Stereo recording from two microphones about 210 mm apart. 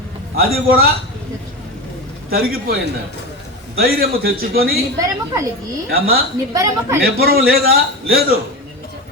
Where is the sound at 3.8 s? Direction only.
45° right (ahead or behind).